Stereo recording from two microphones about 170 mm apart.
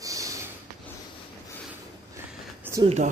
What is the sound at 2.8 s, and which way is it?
Speech, 40° right (ahead or behind).